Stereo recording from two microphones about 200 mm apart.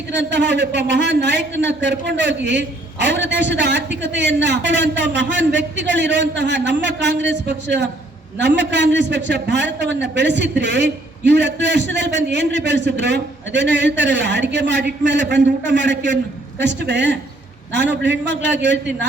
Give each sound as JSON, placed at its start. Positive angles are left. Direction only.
{"t": 0.2, "sound": "a man's voice", "side_deg": -60}